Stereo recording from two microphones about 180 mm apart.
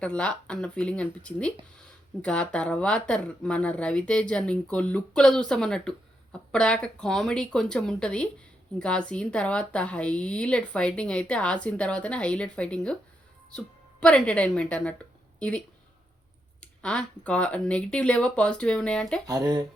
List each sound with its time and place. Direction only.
0.0 s a woman's voice: 5° left (ahead or behind)
14.0 s a woman's voice: 5° left (ahead or behind)
19.3 s speech: 20° right (ahead or behind)